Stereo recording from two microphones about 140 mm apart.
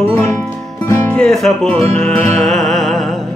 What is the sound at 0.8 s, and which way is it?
Speech, 10° left (ahead or behind).